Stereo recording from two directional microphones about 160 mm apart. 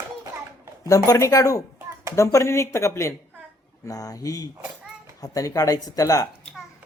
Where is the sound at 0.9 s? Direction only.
20° left (ahead or behind).